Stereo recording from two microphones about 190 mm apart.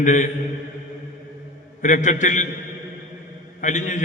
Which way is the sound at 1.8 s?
40° left (ahead or behind).